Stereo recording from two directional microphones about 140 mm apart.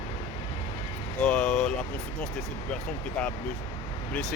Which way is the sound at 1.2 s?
5° left (ahead or behind).